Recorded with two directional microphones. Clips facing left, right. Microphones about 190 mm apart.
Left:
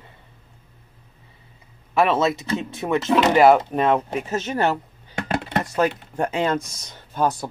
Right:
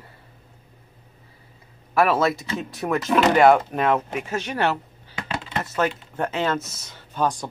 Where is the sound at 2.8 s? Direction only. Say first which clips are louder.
Left 1 dB; 10° left (ahead or behind).